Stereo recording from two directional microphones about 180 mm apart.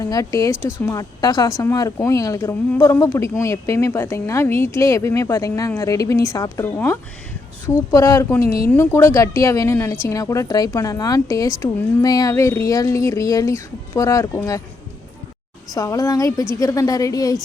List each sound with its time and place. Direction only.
0.0 s a woman's voice: 20° left (ahead or behind)
0.5 s speech: 5° right (ahead or behind)
0.9 s speech: 20° left (ahead or behind)
15.7 s a woman's voice: 20° left (ahead or behind)